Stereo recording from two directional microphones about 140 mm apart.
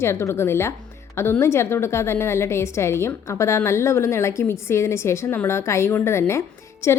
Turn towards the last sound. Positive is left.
turn(degrees=20)  # may be behind; listen again after turning